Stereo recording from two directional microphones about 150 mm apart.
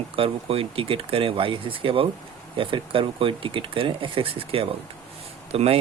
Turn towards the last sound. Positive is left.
turn(degrees=-40)  # may be behind; listen again after turning